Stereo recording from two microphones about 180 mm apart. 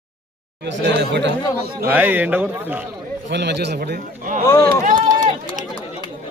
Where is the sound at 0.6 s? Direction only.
75° right (ahead or behind).